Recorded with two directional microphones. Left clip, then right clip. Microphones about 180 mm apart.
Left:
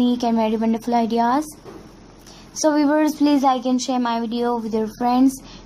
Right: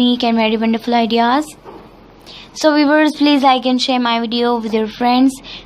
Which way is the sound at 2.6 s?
10° right (ahead or behind).